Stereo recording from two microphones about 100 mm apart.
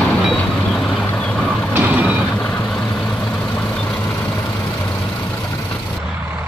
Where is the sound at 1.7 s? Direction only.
20° right (ahead or behind).